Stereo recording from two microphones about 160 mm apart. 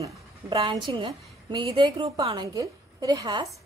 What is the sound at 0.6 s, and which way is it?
A woman's voice, 30° right (ahead or behind).